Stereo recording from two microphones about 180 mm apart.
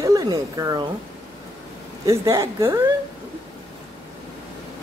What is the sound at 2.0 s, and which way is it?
Speech, 15° right (ahead or behind).